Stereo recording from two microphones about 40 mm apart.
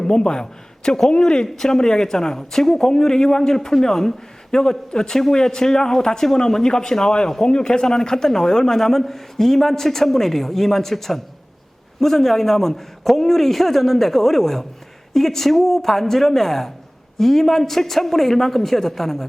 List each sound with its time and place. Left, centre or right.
0.0 s a man's voice: centre